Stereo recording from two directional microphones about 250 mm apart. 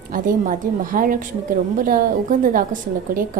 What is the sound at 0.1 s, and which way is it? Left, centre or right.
A woman's voice, right.